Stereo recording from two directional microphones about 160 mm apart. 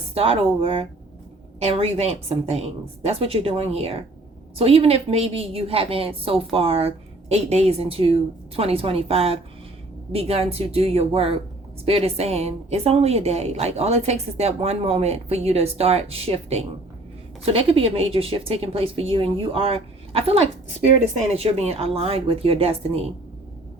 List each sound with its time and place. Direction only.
0.1 s a woman's voice: 35° right (ahead or behind)